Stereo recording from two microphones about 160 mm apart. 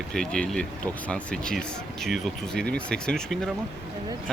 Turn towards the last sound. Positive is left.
turn(degrees=5)  # may be behind; listen again after turning